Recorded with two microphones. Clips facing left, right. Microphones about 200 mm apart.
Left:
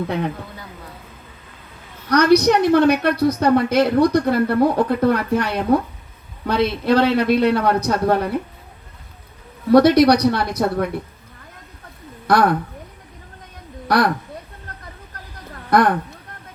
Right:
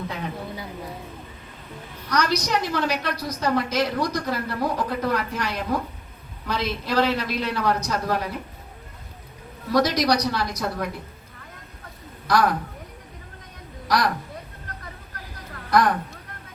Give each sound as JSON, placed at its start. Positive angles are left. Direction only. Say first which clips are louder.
{"t": 0.5, "sound": "a sound", "louder": "right 4 dB", "side_deg": -10}
{"t": 2.0, "sound": "a woman's voice", "louder": "left 10 dB", "side_deg": 60}
{"t": 9.7, "sound": "a woman's voice", "louder": "left 9 dB", "side_deg": 60}
{"t": 12.3, "sound": "a woman's voice", "louder": "left 5 dB", "side_deg": 60}
{"t": 13.8, "sound": "speech", "louder": "left 5 dB", "side_deg": 60}
{"t": 15.7, "sound": "a woman's voice", "louder": "left 4 dB", "side_deg": 60}